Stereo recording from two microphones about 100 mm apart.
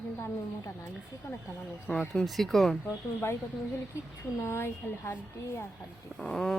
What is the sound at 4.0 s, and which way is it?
A woman's voice, 30° left (ahead or behind).